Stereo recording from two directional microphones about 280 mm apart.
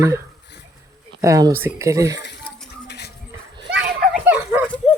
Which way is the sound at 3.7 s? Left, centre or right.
Right.